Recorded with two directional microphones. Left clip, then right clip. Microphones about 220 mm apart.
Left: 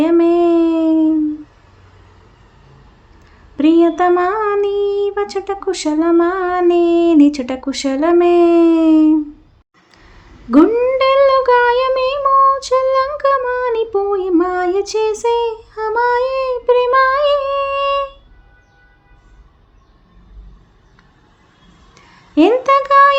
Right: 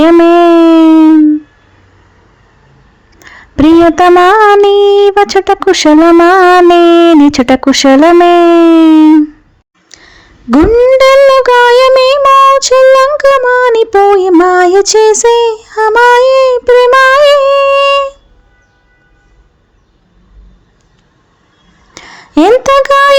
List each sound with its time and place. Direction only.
0.0 s howl: 40° right (ahead or behind)
3.2 s a sound: 40° right (ahead or behind)
3.8 s speech: 40° right (ahead or behind)
9.9 s speech: 30° right (ahead or behind)
21.9 s speech: 40° right (ahead or behind)